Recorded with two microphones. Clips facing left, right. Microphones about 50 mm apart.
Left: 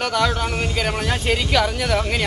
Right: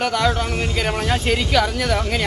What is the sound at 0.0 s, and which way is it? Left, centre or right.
Speech, centre.